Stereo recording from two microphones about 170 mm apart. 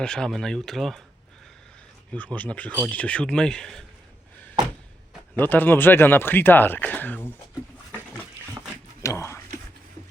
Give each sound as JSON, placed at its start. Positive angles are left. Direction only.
{"t": 0.0, "sound": "speech", "side_deg": 5}
{"t": 2.1, "sound": "speech", "side_deg": 10}
{"t": 5.4, "sound": "speech", "side_deg": 10}
{"t": 9.0, "sound": "a sound", "side_deg": 15}